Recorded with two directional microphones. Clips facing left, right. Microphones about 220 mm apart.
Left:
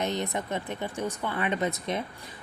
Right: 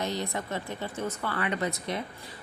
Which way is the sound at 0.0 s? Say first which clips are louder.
Left 2 dB; 20° left (ahead or behind).